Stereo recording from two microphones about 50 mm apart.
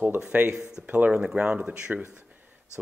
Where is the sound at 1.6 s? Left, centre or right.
Centre.